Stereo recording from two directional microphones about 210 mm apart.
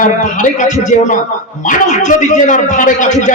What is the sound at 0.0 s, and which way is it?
A man's voice, 35° left (ahead or behind).